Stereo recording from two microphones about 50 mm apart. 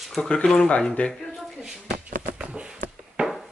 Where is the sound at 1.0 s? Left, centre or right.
Left.